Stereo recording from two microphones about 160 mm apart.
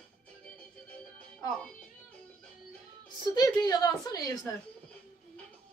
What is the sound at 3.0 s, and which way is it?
Speech, 25° left (ahead or behind).